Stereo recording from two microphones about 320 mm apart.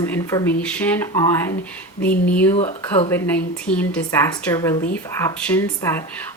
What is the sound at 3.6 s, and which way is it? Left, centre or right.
Speech, centre.